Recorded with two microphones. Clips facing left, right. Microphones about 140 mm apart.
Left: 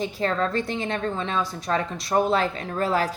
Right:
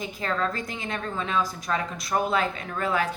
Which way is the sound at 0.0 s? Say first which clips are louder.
Left 4 dB; 35° left (ahead or behind).